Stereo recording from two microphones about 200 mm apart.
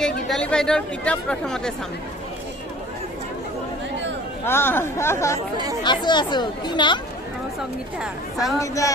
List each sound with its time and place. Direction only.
0.0 s speech: 5° left (ahead or behind)
4.5 s speech: 10° left (ahead or behind)
8.0 s speech: centre (ahead or behind)
8.5 s speech: 15° left (ahead or behind)